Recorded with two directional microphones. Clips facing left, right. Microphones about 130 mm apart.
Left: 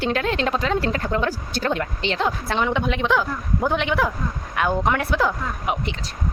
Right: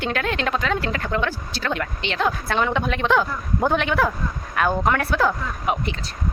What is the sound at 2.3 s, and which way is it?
A woman's voice, 20° left (ahead or behind).